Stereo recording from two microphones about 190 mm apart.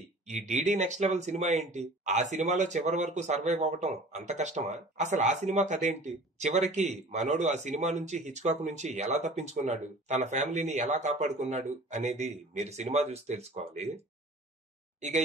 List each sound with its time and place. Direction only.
0.3 s speech: 40° right (ahead or behind)
15.0 s speech: 35° right (ahead or behind)